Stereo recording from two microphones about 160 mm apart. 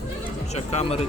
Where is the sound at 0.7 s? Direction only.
40° left (ahead or behind).